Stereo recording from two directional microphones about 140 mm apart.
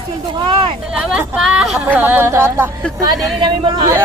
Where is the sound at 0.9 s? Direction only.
5° right (ahead or behind).